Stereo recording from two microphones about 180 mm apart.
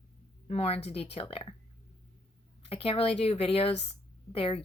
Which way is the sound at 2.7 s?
30° left (ahead or behind).